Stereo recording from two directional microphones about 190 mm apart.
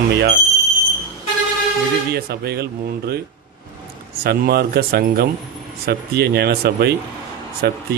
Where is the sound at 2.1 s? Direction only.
55° right (ahead or behind).